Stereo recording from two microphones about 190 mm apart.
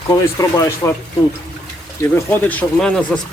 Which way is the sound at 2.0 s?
10° left (ahead or behind).